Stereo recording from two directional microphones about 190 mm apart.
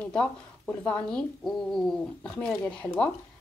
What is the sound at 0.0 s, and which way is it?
A woman's voice, 5° left (ahead or behind).